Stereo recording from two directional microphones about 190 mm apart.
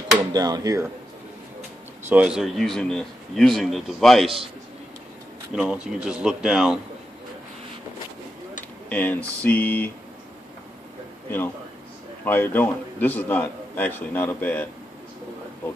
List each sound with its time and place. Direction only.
0.3 s speech: 20° right (ahead or behind)
2.0 s speech: 5° right (ahead or behind)
5.5 s speech: 5° right (ahead or behind)
8.8 s a man's voice: 10° left (ahead or behind)
11.2 s a man's voice: 10° left (ahead or behind)